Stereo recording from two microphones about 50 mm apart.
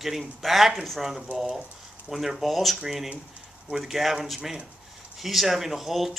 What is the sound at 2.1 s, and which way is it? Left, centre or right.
Speech, centre.